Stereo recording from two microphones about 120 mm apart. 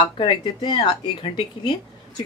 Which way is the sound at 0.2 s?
40° left (ahead or behind).